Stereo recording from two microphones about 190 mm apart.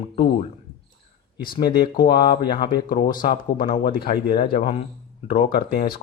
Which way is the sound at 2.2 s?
25° left (ahead or behind).